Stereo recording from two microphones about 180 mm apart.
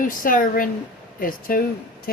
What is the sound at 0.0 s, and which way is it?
Speech, 50° left (ahead or behind).